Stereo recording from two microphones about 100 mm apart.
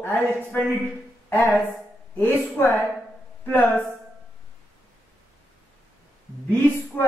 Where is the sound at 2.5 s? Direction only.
20° left (ahead or behind).